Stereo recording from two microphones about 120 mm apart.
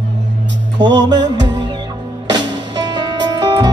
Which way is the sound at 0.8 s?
35° right (ahead or behind).